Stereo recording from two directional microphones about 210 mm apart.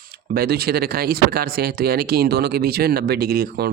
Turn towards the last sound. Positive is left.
turn(degrees=-45)  # may be behind; listen again after turning